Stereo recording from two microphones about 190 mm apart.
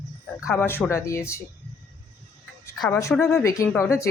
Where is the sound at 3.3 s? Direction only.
15° left (ahead or behind).